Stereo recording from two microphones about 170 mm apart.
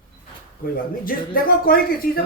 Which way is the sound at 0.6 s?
60° left (ahead or behind).